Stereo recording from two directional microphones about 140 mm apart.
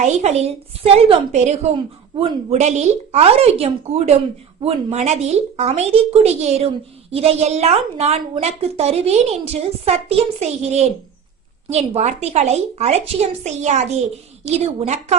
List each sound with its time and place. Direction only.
0.0 s a woman's voice: 55° right (ahead or behind)